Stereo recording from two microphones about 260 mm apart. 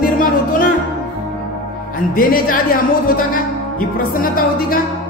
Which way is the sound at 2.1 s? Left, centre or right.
Left.